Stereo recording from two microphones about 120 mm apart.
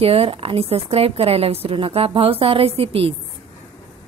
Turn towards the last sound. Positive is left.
turn(degrees=-55)  # may be behind; listen again after turning